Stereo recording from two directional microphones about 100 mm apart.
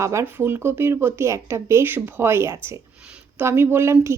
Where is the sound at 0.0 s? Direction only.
30° right (ahead or behind).